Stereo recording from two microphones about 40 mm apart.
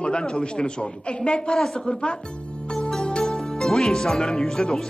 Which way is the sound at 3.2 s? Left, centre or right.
Centre.